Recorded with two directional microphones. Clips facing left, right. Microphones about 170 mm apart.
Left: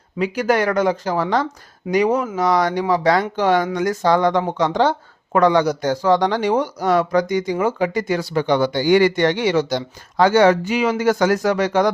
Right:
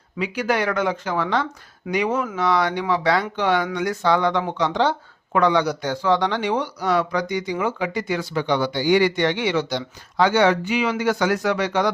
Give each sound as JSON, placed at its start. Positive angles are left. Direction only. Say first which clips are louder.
{"t": 0.2, "sound": "speech", "louder": "left 4 dB", "side_deg": 45}